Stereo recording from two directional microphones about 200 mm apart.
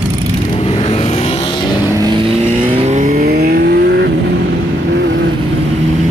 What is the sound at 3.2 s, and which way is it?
Vehicle, 50° right (ahead or behind).